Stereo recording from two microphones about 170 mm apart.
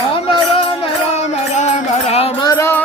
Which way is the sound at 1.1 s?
45° left (ahead or behind).